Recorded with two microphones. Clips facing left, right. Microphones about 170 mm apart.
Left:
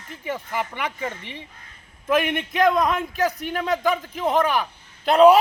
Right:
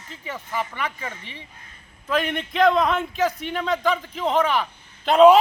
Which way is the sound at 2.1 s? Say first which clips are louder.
Left 3 dB; 10° left (ahead or behind).